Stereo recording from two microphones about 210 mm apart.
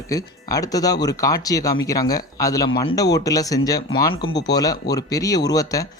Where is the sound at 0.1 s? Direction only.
15° left (ahead or behind).